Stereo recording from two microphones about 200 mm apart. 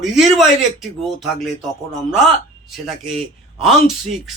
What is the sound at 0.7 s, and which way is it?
Speech, centre (ahead or behind).